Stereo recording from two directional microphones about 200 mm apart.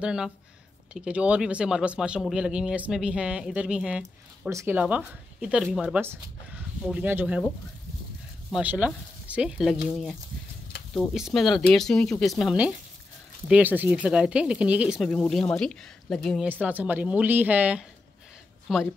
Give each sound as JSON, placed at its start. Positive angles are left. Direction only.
{"t": 0.0, "sound": "speech", "side_deg": -5}
{"t": 8.5, "sound": "speech", "side_deg": -5}
{"t": 11.1, "sound": "speech", "side_deg": 0}